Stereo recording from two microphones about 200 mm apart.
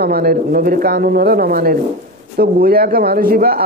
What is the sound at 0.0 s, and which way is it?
A man's voice, 50° right (ahead or behind).